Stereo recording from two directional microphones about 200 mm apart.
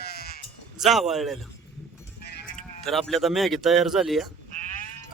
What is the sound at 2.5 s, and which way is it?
Speech, centre (ahead or behind).